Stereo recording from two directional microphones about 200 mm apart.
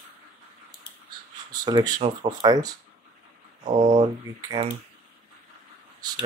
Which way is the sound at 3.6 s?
40° right (ahead or behind).